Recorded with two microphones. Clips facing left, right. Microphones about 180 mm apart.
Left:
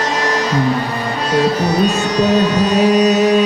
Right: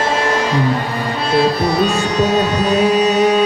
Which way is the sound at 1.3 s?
40° left (ahead or behind).